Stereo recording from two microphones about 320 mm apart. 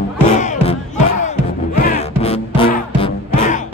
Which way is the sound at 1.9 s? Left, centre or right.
Centre.